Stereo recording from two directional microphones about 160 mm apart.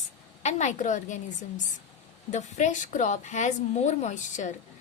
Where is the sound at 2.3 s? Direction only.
50° left (ahead or behind).